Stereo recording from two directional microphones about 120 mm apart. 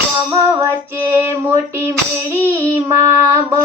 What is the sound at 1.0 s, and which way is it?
Child singing, 20° right (ahead or behind).